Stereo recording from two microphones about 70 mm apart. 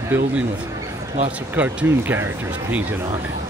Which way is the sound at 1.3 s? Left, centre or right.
Right.